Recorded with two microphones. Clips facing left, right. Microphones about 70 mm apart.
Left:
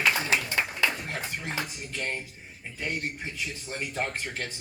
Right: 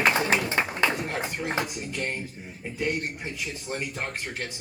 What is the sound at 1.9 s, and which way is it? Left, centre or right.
Speech, centre.